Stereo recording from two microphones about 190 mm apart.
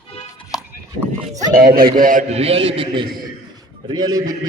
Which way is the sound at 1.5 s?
50° right (ahead or behind).